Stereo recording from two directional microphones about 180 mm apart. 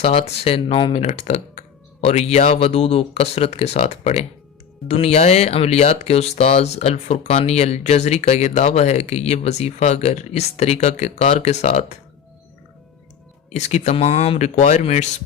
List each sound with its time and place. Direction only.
0.0 s speech: 35° left (ahead or behind)
13.5 s speech: 40° left (ahead or behind)